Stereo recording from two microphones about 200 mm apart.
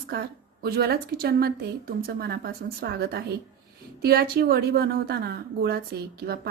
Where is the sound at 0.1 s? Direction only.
50° right (ahead or behind).